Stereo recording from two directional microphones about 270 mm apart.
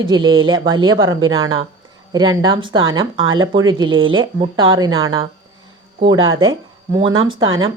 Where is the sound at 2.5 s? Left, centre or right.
Right.